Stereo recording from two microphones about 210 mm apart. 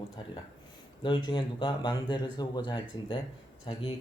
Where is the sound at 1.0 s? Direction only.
20° left (ahead or behind).